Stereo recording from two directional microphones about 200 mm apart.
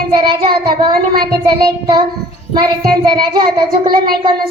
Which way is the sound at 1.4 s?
20° right (ahead or behind).